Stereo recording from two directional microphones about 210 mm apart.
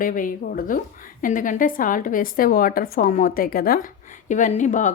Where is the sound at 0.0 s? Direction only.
40° left (ahead or behind).